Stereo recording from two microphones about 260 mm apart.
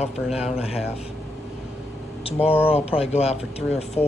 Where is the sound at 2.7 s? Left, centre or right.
Left.